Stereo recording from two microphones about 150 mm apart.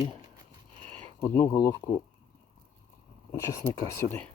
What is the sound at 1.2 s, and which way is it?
Speech, 15° left (ahead or behind).